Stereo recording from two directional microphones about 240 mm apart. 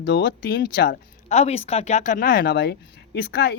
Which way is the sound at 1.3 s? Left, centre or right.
Left.